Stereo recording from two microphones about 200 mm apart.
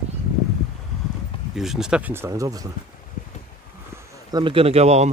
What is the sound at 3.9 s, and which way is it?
Speech, 20° right (ahead or behind).